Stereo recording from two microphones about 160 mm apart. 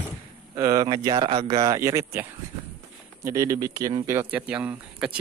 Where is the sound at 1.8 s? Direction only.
20° right (ahead or behind).